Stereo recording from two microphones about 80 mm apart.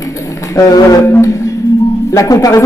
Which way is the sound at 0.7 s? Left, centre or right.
Left.